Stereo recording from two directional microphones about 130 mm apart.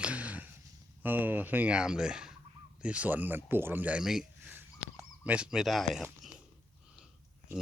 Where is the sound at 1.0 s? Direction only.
15° right (ahead or behind).